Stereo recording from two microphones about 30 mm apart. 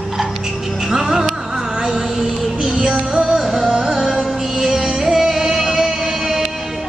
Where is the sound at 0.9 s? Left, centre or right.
Centre.